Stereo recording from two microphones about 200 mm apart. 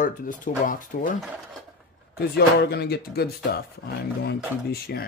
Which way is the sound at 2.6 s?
55° left (ahead or behind).